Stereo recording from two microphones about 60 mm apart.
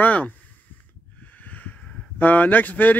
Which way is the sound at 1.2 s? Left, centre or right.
Left.